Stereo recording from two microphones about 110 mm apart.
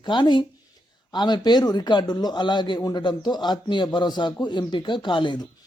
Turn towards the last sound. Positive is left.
turn(degrees=45)  # may be behind; listen again after turning